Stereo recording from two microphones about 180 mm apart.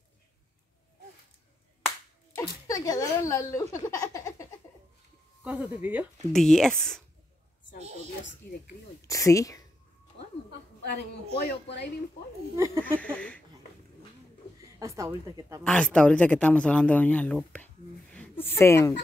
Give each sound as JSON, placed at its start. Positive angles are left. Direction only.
{"t": 2.3, "sound": "speech", "side_deg": 20}
{"t": 3.8, "sound": "a sound", "side_deg": 20}
{"t": 5.4, "sound": "speech", "side_deg": -5}
{"t": 6.3, "sound": "speech", "side_deg": 0}
{"t": 8.4, "sound": "speech", "side_deg": 10}
{"t": 11.4, "sound": "speech", "side_deg": 65}
{"t": 12.5, "sound": "speech", "side_deg": -15}
{"t": 12.8, "sound": "speech", "side_deg": 10}
{"t": 14.6, "sound": "a woman's voice", "side_deg": -15}
{"t": 15.6, "sound": "speech", "side_deg": 5}